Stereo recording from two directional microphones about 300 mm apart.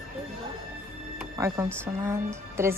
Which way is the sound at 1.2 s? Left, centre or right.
Centre.